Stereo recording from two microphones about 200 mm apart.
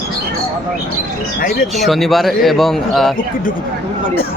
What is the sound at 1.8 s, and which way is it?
A man's voice, centre (ahead or behind).